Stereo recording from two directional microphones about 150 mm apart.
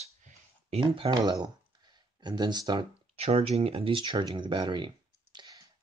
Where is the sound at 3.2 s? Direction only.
40° right (ahead or behind).